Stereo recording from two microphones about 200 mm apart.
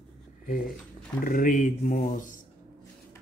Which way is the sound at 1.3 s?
40° left (ahead or behind).